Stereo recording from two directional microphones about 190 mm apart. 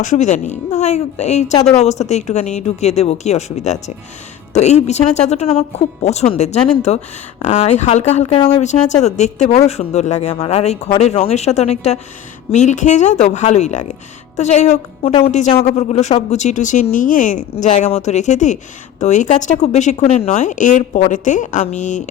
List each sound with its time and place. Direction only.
0.0 s speech: 40° left (ahead or behind)